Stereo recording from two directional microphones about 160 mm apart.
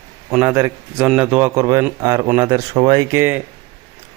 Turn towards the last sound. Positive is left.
turn(degrees=-15)  # may be behind; listen again after turning